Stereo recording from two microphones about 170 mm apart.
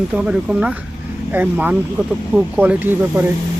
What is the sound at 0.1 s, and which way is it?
Speech, 5° right (ahead or behind).